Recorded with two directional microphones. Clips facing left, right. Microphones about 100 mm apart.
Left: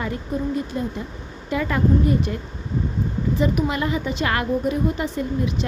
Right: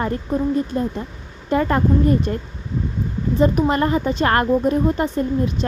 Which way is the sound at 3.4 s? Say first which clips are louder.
Right 6 dB; 40° right (ahead or behind).